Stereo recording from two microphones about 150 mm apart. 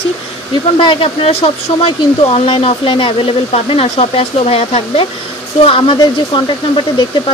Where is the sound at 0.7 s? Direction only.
35° left (ahead or behind).